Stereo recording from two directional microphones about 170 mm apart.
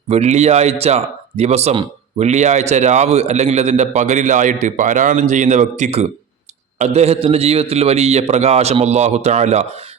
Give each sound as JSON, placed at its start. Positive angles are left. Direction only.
{"t": 0.1, "sound": "speech", "side_deg": -40}